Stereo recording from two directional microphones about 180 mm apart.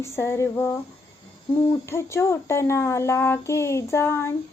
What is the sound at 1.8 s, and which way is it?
Speech, 15° left (ahead or behind).